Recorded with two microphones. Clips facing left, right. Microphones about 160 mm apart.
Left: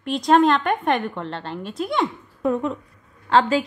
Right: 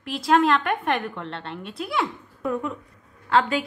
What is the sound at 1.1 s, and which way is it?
A woman's voice, 35° left (ahead or behind).